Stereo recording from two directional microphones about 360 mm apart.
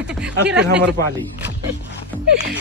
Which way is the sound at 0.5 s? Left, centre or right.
Right.